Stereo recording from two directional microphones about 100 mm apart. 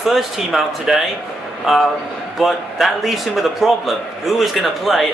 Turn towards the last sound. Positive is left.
turn(degrees=0)  # may be behind; listen again after turning